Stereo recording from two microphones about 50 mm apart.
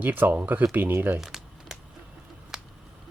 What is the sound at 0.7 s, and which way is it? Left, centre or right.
Speech, right.